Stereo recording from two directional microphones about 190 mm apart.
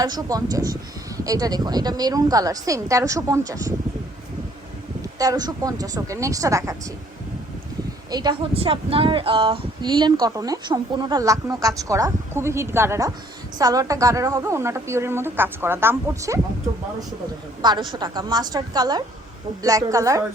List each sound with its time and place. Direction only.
0.0 s speech: 20° right (ahead or behind)
5.1 s speech: 20° right (ahead or behind)
8.1 s a woman's voice: 25° right (ahead or behind)
17.6 s a woman's voice: 25° right (ahead or behind)